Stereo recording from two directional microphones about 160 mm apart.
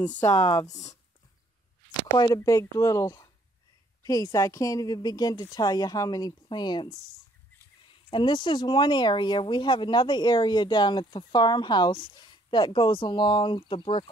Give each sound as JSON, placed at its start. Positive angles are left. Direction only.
{"t": 0.1, "sound": "speech", "side_deg": 10}
{"t": 2.1, "sound": "speech", "side_deg": 25}
{"t": 8.1, "sound": "speech", "side_deg": 30}